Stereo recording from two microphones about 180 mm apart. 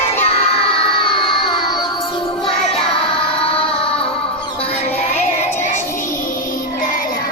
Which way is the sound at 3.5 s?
30° left (ahead or behind).